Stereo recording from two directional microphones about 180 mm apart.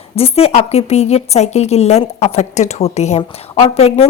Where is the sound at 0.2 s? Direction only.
35° left (ahead or behind).